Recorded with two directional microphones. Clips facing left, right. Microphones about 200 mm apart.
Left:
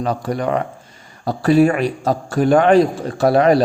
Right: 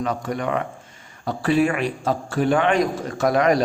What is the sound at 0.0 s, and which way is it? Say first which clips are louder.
A man's voice: left 4 dB; 35° left (ahead or behind).